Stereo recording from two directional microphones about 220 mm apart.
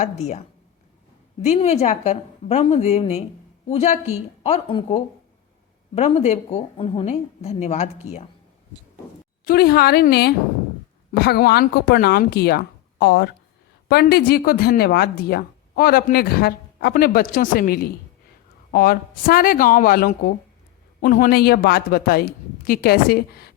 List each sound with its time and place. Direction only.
0.0 s a woman's voice: 30° left (ahead or behind)
9.4 s speech: 45° left (ahead or behind)